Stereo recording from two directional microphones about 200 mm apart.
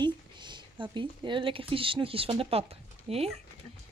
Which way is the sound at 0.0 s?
25° right (ahead or behind).